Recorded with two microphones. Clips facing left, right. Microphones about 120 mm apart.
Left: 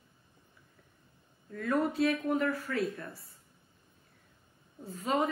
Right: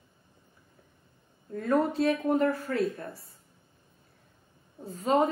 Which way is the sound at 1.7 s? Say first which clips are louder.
Right 3 dB; 25° right (ahead or behind).